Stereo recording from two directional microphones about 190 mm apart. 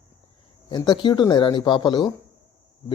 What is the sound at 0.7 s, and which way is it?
Speech, 25° left (ahead or behind).